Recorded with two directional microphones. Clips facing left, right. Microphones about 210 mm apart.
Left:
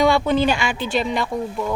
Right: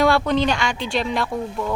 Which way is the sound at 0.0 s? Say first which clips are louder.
Left 1 dB; centre (ahead or behind).